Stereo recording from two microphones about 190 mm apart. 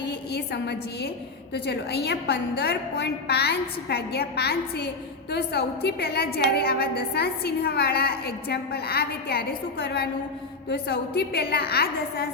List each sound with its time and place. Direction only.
0.0 s a woman's voice: 65° left (ahead or behind)
10.7 s a woman's voice: 60° left (ahead or behind)